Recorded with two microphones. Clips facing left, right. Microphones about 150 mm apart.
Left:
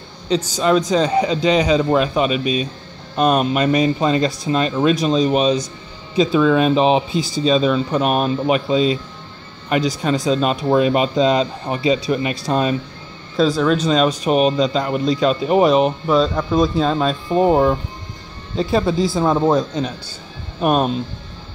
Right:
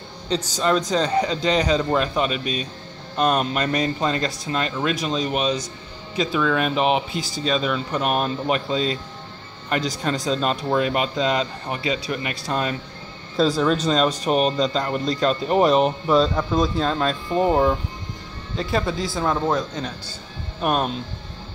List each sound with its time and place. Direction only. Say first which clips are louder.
0.3 s speech: left 5 dB; 5° left (ahead or behind); by 12.7 s 25° left (ahead or behind)
13.4 s speech: left 3 dB; centre (ahead or behind)
18.6 s speech: left 7 dB; 25° left (ahead or behind)